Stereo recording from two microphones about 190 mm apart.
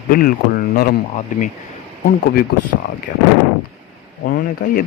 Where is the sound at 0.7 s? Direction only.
50° left (ahead or behind).